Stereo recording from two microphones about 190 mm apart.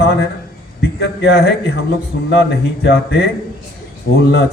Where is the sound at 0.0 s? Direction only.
60° left (ahead or behind).